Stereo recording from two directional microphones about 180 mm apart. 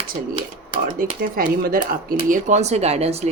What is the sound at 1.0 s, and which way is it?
A woman's voice, 50° right (ahead or behind).